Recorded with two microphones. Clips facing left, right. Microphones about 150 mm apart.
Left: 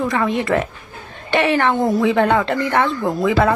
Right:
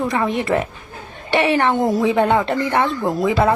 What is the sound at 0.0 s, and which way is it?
Speech, 20° right (ahead or behind).